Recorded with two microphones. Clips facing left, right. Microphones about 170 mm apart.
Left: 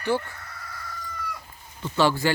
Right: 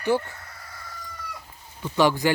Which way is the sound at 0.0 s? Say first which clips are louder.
Right 2 dB; 15° right (ahead or behind).